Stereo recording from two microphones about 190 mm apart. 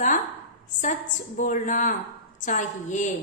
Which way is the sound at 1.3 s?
45° left (ahead or behind).